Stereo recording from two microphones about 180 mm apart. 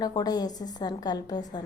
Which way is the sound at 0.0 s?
20° left (ahead or behind).